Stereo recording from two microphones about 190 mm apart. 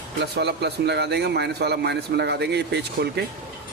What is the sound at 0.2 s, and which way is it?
Speech, 60° right (ahead or behind).